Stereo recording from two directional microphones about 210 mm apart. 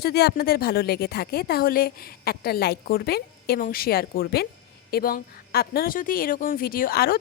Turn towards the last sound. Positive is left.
turn(degrees=45)  # may be behind; listen again after turning